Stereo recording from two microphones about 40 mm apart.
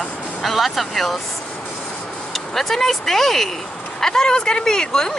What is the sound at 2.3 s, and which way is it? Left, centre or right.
Speech, centre.